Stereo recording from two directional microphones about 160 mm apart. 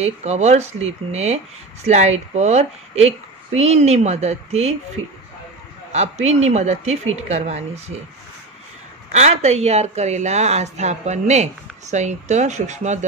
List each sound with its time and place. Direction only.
0.0 s speech: 45° right (ahead or behind)
5.9 s speech: 45° right (ahead or behind)
9.1 s speech: 45° right (ahead or behind)